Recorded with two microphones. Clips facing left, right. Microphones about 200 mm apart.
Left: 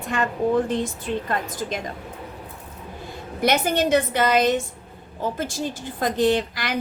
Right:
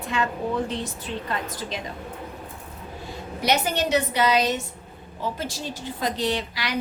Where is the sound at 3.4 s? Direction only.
50° left (ahead or behind).